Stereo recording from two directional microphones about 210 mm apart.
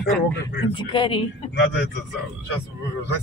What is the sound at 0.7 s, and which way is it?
Speech, 20° left (ahead or behind).